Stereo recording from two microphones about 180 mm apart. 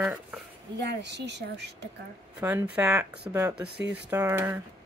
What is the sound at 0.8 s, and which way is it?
Speech, 75° right (ahead or behind).